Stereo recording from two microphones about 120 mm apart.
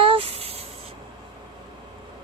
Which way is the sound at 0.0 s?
50° right (ahead or behind).